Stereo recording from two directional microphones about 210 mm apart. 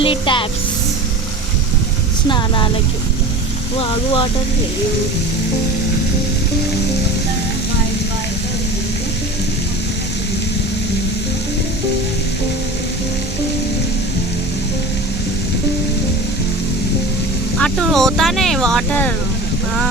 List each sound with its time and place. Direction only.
0.0 s a sound: 25° left (ahead or behind)
3.8 s speech: 25° left (ahead or behind)
17.6 s speech: centre (ahead or behind)